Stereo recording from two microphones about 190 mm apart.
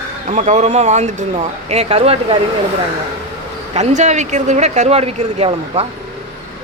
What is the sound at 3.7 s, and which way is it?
Speech, 40° right (ahead or behind).